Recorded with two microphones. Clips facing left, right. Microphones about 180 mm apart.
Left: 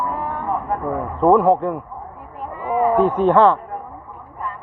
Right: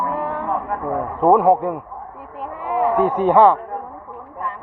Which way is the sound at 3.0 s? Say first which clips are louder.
Right 1 dB; 10° right (ahead or behind).